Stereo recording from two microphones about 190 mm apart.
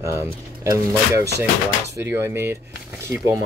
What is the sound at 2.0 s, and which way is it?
Speech, 10° right (ahead or behind).